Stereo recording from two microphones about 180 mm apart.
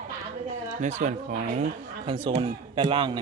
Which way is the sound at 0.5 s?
40° right (ahead or behind).